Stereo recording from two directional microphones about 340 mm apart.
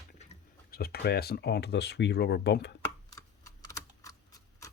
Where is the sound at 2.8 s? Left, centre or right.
Centre.